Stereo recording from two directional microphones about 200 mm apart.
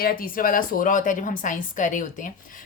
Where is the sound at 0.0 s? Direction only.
45° left (ahead or behind).